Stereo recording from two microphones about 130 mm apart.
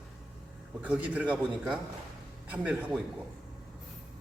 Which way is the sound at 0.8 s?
10° right (ahead or behind).